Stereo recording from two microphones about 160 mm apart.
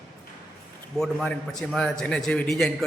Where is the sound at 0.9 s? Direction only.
5° left (ahead or behind).